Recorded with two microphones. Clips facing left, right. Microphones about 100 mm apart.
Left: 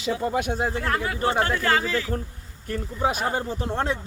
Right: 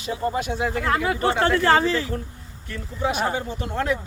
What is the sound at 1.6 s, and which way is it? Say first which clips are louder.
Speech: right 4 dB; 30° right (ahead or behind).